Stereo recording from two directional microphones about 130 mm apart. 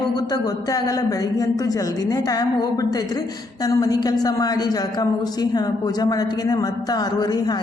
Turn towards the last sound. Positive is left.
turn(degrees=30)  # may be behind; listen again after turning